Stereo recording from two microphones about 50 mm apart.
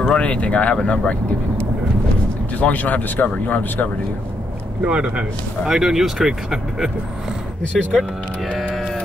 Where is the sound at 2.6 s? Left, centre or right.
Left.